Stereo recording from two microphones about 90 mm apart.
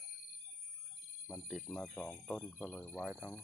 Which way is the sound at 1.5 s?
10° right (ahead or behind).